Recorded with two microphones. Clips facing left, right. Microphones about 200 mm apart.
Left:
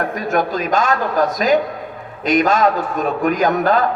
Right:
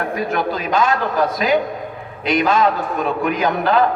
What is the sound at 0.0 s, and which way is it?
Speech, 45° left (ahead or behind).